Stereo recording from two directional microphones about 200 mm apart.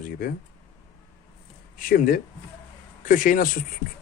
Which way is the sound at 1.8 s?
45° left (ahead or behind).